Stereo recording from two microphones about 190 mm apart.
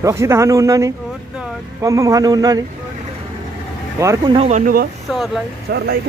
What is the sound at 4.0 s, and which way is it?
Speech, 15° right (ahead or behind).